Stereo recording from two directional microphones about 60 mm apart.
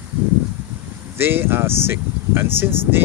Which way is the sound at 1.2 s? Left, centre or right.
Right.